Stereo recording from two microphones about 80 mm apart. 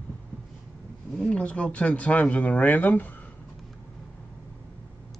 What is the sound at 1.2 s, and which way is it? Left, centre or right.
Speech, centre.